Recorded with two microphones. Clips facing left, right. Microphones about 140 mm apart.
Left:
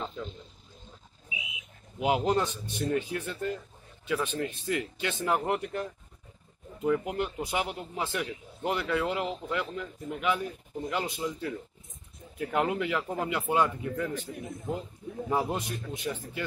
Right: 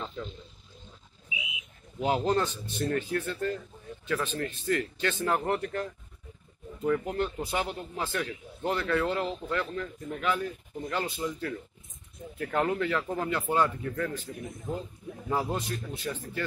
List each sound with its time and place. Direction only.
2.0 s speech: 10° left (ahead or behind)